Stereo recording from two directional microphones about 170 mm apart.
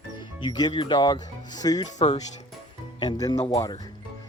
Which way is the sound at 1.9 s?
40° left (ahead or behind).